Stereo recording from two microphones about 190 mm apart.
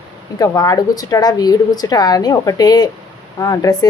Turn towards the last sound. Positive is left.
turn(degrees=20)  # may be behind; listen again after turning